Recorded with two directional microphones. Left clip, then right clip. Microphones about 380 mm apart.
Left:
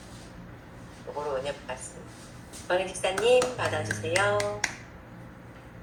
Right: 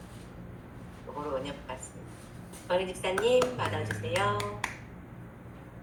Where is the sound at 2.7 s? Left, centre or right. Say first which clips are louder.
Left 2 dB; centre.